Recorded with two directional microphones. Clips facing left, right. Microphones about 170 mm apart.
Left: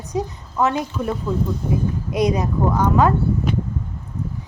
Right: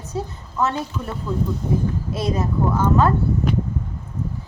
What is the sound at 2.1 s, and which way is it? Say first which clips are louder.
A woman's voice: left 5 dB; 15° left (ahead or behind).